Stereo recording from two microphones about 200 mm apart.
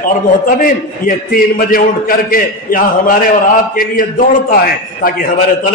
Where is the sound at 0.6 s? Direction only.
45° left (ahead or behind).